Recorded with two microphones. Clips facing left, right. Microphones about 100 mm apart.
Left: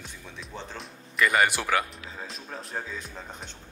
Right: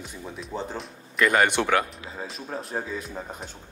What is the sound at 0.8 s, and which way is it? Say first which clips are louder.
Speech: right 1 dB; centre (ahead or behind).